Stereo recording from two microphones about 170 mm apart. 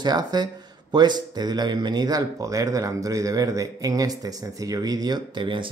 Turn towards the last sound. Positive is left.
turn(degrees=-30)  # may be behind; listen again after turning